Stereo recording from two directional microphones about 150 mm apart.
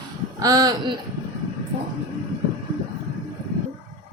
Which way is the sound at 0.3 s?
25° right (ahead or behind).